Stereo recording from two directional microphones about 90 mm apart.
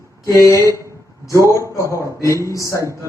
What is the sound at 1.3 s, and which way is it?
Speech, 35° right (ahead or behind).